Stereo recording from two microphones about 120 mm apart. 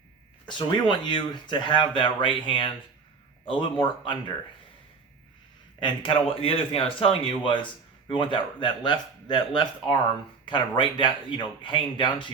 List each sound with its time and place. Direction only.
0.4 s speech: 40° left (ahead or behind)
5.8 s speech: 45° left (ahead or behind)